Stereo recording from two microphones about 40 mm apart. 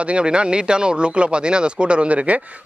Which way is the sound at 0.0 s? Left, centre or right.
Right.